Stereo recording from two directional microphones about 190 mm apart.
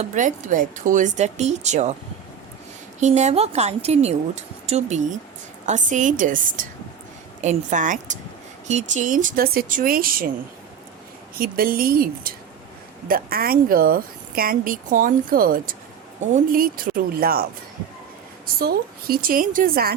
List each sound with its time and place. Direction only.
0.0 s speech: 40° right (ahead or behind)
3.0 s speech: 35° right (ahead or behind)
11.3 s speech: 50° right (ahead or behind)
18.6 s speech: 55° right (ahead or behind)